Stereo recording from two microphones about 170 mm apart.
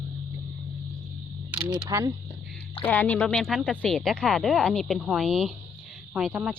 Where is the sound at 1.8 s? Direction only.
20° right (ahead or behind).